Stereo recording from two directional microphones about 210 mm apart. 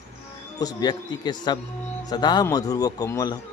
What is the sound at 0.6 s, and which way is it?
A man's voice, 20° left (ahead or behind).